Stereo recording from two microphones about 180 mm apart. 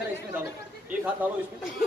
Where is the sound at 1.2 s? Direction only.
10° right (ahead or behind).